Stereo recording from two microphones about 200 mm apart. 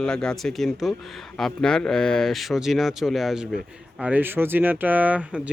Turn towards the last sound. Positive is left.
turn(degrees=-5)  # may be behind; listen again after turning